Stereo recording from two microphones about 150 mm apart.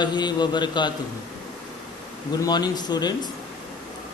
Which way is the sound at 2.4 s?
25° left (ahead or behind).